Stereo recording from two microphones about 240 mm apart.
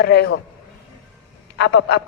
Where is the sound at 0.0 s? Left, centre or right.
Left.